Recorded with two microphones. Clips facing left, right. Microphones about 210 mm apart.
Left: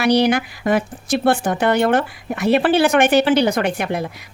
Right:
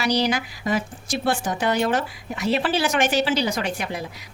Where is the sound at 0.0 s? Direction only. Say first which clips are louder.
Left 7 dB; 60° left (ahead or behind).